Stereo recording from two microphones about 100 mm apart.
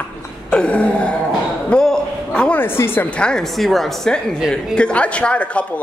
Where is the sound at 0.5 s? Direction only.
10° left (ahead or behind).